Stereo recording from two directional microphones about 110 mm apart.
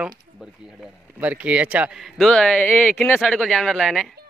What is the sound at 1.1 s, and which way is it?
Speech, 15° right (ahead or behind).